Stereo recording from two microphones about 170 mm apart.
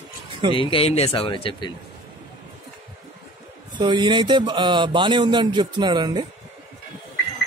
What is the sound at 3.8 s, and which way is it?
Speech, 30° right (ahead or behind).